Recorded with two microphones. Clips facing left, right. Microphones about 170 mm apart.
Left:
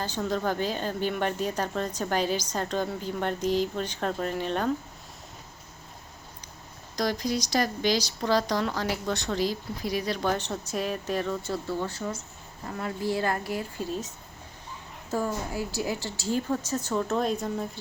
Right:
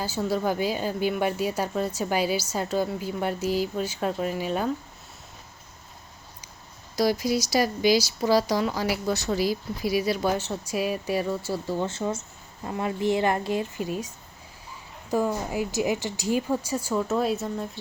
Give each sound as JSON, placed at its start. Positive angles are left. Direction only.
{"t": 0.0, "sound": "speech", "side_deg": -10}
{"t": 6.9, "sound": "speech", "side_deg": -10}
{"t": 11.9, "sound": "speech", "side_deg": -25}
{"t": 15.1, "sound": "speech", "side_deg": -15}